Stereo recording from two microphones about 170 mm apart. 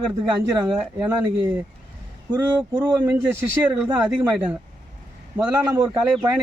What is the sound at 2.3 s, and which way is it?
A man's voice, 15° right (ahead or behind).